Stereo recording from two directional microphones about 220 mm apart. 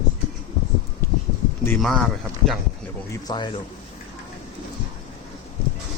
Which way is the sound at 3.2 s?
20° left (ahead or behind).